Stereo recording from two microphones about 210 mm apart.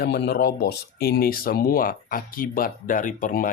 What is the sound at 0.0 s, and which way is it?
Speech, 50° left (ahead or behind).